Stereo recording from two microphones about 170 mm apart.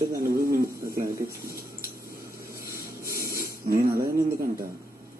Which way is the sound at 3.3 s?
55° right (ahead or behind).